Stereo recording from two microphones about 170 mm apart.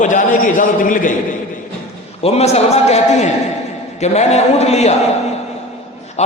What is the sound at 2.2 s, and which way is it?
A man's voice, 40° left (ahead or behind).